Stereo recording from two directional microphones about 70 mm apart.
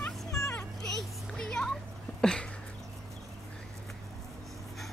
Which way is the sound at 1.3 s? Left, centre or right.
Centre.